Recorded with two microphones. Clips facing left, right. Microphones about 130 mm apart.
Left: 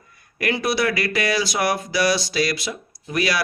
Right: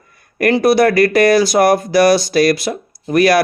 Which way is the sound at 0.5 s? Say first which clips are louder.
Right 11 dB; 45° right (ahead or behind).